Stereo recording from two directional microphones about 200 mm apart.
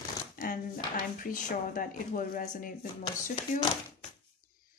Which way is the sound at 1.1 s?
40° left (ahead or behind).